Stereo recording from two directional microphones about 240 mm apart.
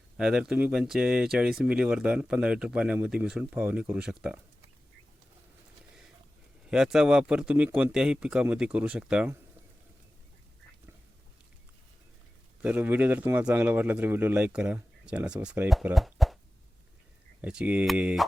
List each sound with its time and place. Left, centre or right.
0.2 s speech: centre
6.7 s speech: centre
12.6 s a man's voice: centre
17.4 s speech: centre